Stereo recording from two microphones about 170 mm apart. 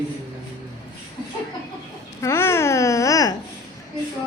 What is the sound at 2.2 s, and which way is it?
Babbling, 15° left (ahead or behind).